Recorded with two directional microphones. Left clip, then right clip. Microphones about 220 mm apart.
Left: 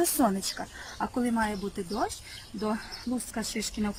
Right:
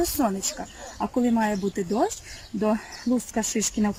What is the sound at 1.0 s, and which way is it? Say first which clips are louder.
Speech: right 5 dB; 15° right (ahead or behind).